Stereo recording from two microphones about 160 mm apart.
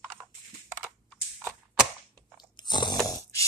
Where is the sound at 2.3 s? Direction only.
25° left (ahead or behind).